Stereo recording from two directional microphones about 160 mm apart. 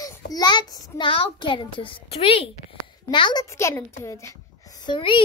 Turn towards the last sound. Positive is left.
turn(degrees=30)  # may be behind; listen again after turning